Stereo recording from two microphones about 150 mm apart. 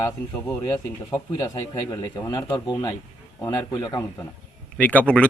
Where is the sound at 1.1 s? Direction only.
25° left (ahead or behind).